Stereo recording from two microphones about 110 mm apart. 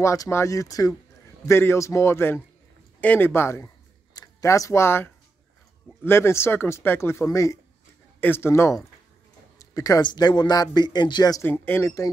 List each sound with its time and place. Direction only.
0.0 s speech: 30° left (ahead or behind)
11.4 s speech: 20° left (ahead or behind)